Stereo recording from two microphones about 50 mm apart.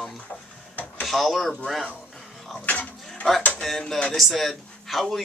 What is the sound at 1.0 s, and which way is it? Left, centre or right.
Speech, centre.